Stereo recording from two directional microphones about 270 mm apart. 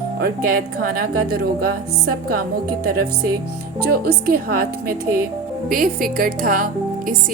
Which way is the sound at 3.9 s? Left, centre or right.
Right.